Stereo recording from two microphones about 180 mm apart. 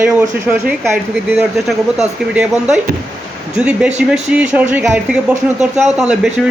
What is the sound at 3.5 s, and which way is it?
Speech, 5° right (ahead or behind).